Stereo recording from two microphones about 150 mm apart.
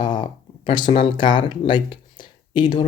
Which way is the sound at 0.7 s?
30° left (ahead or behind).